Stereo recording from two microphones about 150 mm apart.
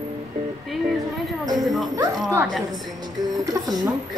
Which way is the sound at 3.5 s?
25° right (ahead or behind).